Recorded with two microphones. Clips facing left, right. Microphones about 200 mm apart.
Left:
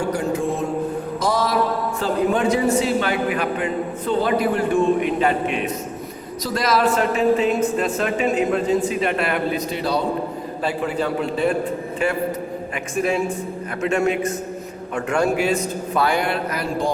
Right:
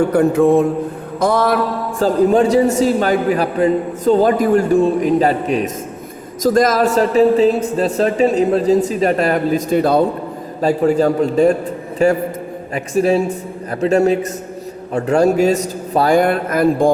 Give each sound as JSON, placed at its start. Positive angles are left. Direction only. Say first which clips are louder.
{"t": 0.1, "sound": "a man's voice", "louder": "right 10 dB", "side_deg": -60}
{"t": 2.0, "sound": "a man's voice", "louder": "right 8 dB", "side_deg": -40}